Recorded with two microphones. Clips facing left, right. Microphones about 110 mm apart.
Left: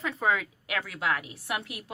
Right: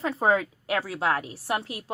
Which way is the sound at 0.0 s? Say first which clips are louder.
Right 5 dB; 35° right (ahead or behind).